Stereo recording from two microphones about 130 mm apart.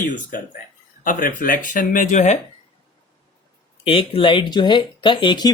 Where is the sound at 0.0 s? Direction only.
90° left; by 2.4 s 65° left (ahead or behind).